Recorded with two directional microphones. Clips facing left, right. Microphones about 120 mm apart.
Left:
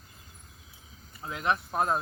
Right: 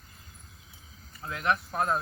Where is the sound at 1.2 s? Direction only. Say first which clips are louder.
Even; 20° left (ahead or behind).